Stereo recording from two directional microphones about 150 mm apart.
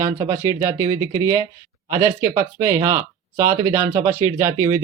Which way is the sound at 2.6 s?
25° right (ahead or behind).